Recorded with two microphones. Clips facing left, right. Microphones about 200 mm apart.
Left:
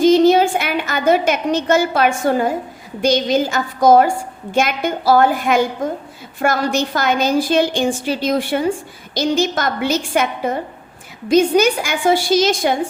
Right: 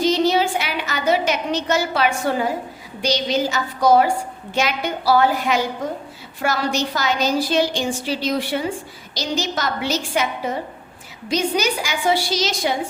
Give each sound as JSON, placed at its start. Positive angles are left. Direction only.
{"t": 0.0, "sound": "a woman's voice", "side_deg": 50}